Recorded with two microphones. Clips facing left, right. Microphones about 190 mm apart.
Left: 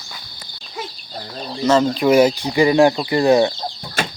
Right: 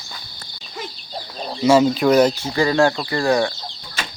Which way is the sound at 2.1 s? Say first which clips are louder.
Left 1 dB; 10° left (ahead or behind).